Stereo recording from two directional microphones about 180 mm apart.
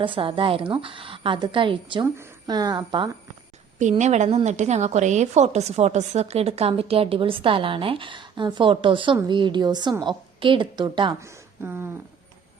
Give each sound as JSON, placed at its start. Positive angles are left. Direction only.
{"t": 0.0, "sound": "a woman's voice", "side_deg": -30}
{"t": 3.8, "sound": "a woman's voice", "side_deg": -40}
{"t": 11.2, "sound": "a woman's voice", "side_deg": -15}